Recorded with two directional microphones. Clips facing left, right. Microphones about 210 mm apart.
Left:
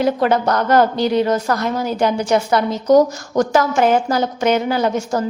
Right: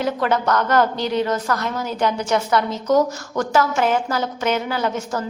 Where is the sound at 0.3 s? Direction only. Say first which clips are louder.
Left 3 dB; 35° left (ahead or behind).